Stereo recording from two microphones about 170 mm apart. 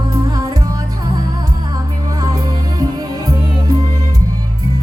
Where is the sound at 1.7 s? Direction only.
20° right (ahead or behind).